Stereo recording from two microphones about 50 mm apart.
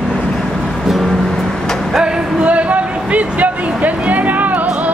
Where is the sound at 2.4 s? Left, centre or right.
Right.